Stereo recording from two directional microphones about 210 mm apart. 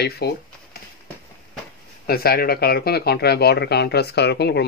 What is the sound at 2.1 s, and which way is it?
Speech, 45° left (ahead or behind).